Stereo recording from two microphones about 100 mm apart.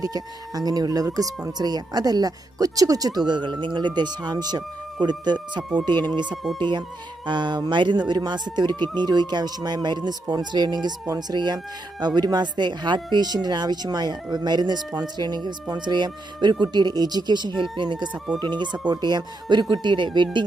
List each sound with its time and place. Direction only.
0.0 s speech: 40° right (ahead or behind)
6.2 s speech: 5° right (ahead or behind)
6.6 s speech: 50° right (ahead or behind)